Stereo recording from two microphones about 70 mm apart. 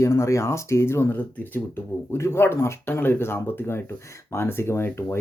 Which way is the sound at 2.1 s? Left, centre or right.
Left.